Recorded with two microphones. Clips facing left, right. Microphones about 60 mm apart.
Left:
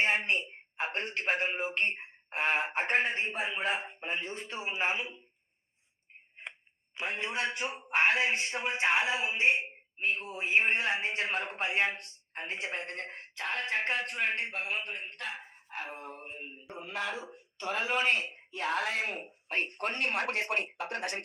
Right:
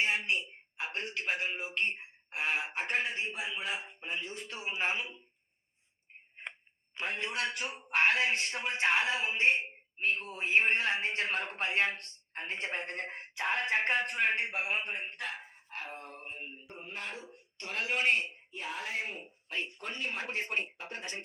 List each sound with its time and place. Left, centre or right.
0.0 s speech: left
6.4 s a sound: centre
6.9 s a man's voice: centre
15.3 s speech: centre
16.7 s speech: left
18.5 s speech: left